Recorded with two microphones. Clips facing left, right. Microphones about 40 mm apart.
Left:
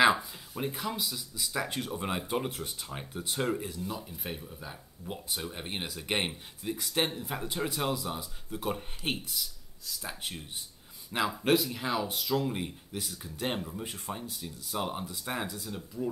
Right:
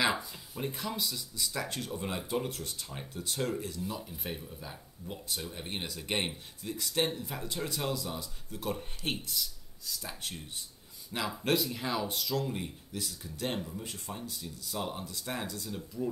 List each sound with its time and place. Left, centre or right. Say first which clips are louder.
0.7 s speech: left 1 dB; centre
3.8 s speech: left 1 dB; centre